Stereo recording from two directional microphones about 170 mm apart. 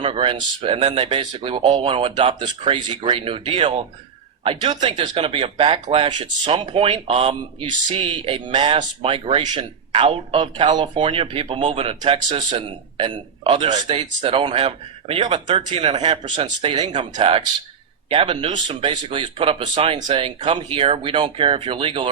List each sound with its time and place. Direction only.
0.0 s speech: 30° right (ahead or behind)